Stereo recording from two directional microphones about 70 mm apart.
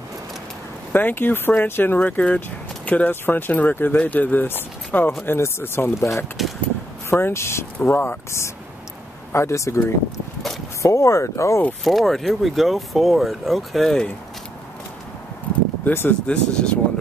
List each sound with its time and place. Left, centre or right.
0.9 s speech: left
11.8 s speech: centre
15.8 s speech: left
16.3 s speech: centre